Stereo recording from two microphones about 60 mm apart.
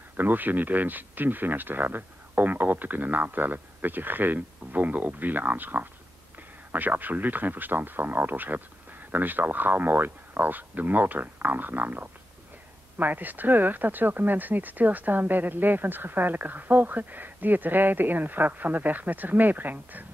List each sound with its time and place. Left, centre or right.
0.2 s speech: right